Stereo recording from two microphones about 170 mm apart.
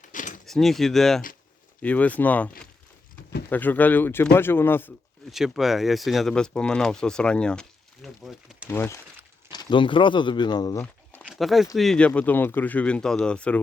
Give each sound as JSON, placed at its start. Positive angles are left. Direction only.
{"t": 0.1, "sound": "keys jangling", "side_deg": 50}
{"t": 0.4, "sound": "speech", "side_deg": 0}
{"t": 3.5, "sound": "speech", "side_deg": 10}
{"t": 5.3, "sound": "speech", "side_deg": 0}
{"t": 8.7, "sound": "speech", "side_deg": 15}
{"t": 9.5, "sound": "speech", "side_deg": 25}
{"t": 11.2, "sound": "speech", "side_deg": 0}